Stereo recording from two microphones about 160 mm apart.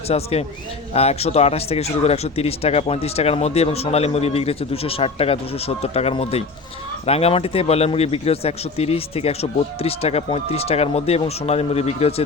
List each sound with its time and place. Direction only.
0.1 s speech: 40° left (ahead or behind)